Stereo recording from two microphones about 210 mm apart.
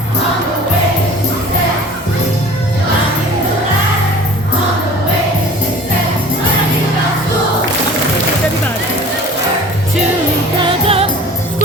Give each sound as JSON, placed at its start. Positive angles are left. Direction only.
{"t": 10.6, "sound": "music of asia", "side_deg": -25}